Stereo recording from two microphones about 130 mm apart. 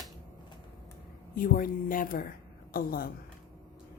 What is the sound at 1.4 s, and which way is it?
A woman's voice, 90° left.